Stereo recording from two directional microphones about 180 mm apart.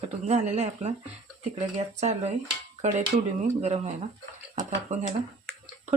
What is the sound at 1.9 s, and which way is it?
Speech, 40° right (ahead or behind).